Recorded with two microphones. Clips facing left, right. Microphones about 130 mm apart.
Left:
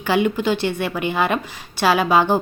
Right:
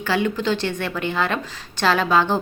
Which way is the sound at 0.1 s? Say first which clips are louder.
Left 3 dB; 15° left (ahead or behind).